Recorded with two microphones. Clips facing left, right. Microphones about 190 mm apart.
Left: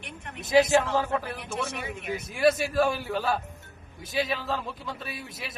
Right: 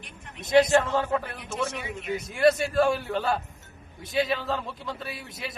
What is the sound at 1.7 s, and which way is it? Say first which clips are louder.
Speech: right 1 dB; 55° left (ahead or behind).